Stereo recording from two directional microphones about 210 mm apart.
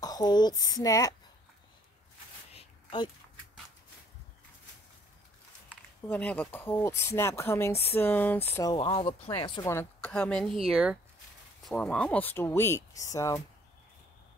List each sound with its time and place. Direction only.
0.0 s speech: 20° left (ahead or behind)
2.5 s a sound: 25° left (ahead or behind)
6.0 s speech: 5° left (ahead or behind)